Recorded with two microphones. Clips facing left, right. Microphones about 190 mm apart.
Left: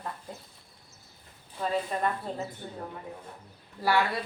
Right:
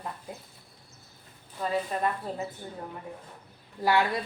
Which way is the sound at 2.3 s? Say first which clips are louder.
Even; 5° right (ahead or behind).